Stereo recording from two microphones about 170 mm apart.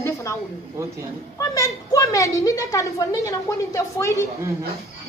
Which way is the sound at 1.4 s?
20° left (ahead or behind).